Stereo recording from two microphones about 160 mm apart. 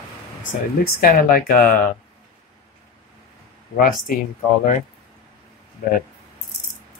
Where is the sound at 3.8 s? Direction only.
60° left (ahead or behind).